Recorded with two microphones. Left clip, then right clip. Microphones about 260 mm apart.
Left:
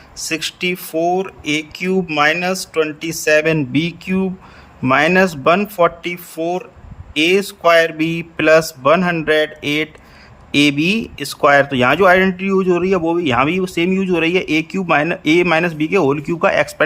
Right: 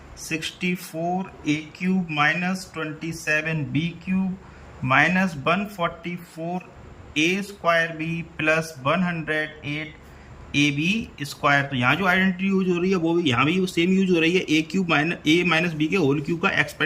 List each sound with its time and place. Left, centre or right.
0.2 s speech: left
0.9 s speech: left
1.5 s a man's voice: left